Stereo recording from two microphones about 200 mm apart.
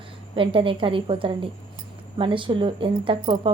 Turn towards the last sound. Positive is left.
turn(degrees=-25)  # may be behind; listen again after turning